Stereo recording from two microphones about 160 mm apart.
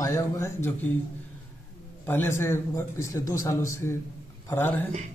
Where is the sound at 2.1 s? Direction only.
15° left (ahead or behind).